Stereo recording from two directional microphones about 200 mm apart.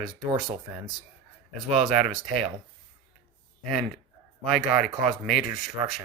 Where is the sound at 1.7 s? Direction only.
Centre (ahead or behind).